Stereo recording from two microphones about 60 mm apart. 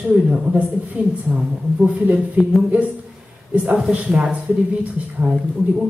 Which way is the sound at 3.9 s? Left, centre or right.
Centre.